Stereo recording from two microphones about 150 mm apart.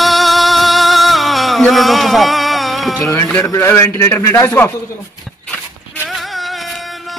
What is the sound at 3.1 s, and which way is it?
A man's voice, 20° left (ahead or behind).